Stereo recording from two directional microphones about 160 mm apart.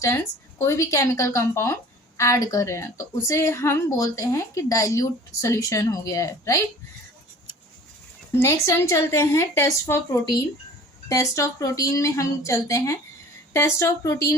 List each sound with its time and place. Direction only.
0.6 s a woman's voice: 15° left (ahead or behind)
8.3 s a woman's voice: 15° left (ahead or behind)